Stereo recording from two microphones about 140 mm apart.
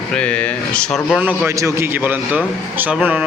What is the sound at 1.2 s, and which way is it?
A man's voice, 10° right (ahead or behind).